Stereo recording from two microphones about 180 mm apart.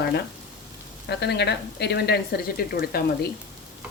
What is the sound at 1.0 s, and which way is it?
Speech, 70° left (ahead or behind).